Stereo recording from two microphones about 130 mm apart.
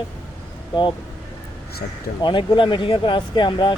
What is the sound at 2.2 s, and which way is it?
Speech, 40° left (ahead or behind).